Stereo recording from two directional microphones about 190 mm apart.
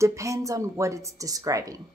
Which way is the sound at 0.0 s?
15° right (ahead or behind).